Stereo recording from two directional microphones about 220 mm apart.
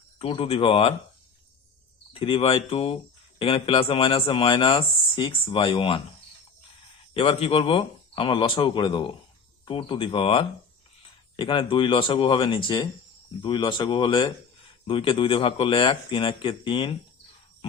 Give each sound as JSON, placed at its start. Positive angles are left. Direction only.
{"t": 0.2, "sound": "speech", "side_deg": 25}
{"t": 2.1, "sound": "speech", "side_deg": 25}
{"t": 7.1, "sound": "speech", "side_deg": 25}